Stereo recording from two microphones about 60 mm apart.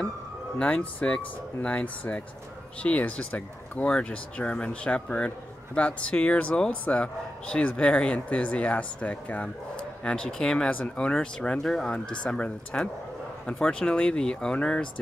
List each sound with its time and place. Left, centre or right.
0.9 s a man's voice: left